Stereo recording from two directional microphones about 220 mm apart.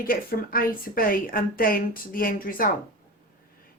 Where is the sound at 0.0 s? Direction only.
40° left (ahead or behind).